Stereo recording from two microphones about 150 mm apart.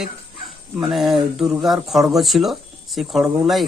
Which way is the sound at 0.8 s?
Centre (ahead or behind).